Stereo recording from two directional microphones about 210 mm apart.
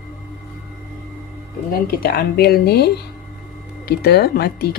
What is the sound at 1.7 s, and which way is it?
Speech, 45° left (ahead or behind).